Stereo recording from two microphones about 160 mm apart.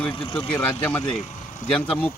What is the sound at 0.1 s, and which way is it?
Speech, 35° left (ahead or behind).